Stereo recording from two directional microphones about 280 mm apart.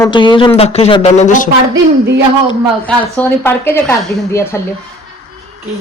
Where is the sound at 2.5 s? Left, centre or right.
Centre.